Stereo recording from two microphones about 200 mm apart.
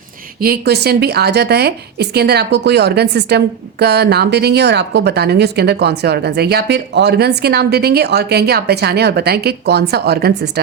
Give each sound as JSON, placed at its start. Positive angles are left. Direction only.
{"t": 0.3, "sound": "a woman's voice", "side_deg": -50}